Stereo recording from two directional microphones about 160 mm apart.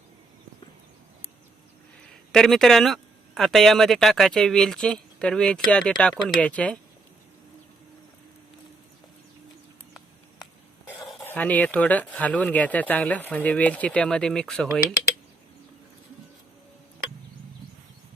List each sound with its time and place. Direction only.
2.3 s speech: centre (ahead or behind)
11.2 s speech: 10° left (ahead or behind)